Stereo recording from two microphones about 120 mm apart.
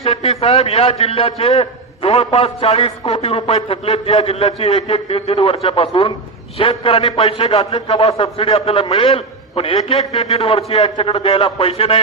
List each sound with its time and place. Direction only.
0.0 s a man's voice: 55° left (ahead or behind)